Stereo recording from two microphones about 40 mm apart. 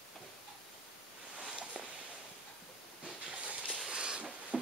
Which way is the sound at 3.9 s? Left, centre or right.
Right.